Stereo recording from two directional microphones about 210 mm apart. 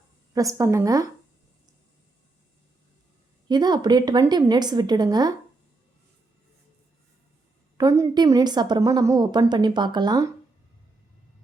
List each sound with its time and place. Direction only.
0.3 s speech: 15° right (ahead or behind)
3.5 s a woman's voice: 20° right (ahead or behind)
7.8 s a woman's voice: 15° right (ahead or behind)